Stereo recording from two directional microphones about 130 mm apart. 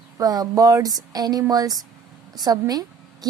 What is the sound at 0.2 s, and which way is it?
A woman's voice, 30° right (ahead or behind).